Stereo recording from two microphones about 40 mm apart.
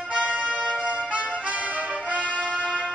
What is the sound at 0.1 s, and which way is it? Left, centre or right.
Music, right.